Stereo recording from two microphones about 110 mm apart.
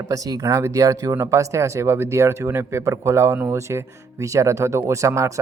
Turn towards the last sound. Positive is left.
turn(degrees=-30)  # may be behind; listen again after turning